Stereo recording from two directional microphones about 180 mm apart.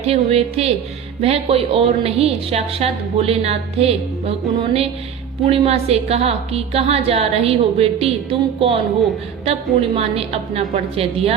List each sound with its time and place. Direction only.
0.0 s a woman's voice: 35° right (ahead or behind)